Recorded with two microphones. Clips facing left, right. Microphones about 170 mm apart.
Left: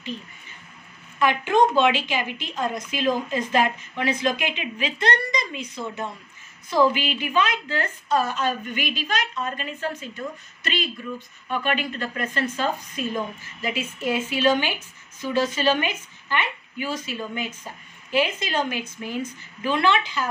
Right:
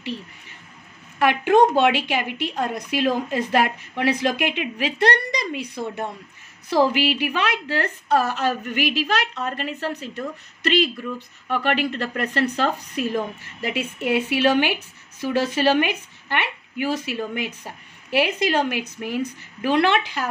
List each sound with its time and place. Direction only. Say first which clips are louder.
1.2 s a woman's voice: right 3 dB; 60° right (ahead or behind)
6.9 s a woman's voice: right 4 dB; 70° right (ahead or behind)